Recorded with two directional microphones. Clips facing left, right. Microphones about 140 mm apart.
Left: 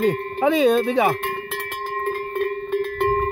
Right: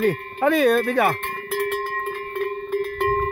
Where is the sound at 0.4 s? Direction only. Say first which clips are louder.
Left 1 dB; 15° left (ahead or behind).